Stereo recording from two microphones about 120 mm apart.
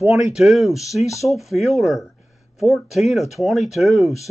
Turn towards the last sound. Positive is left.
turn(degrees=0)  # may be behind; listen again after turning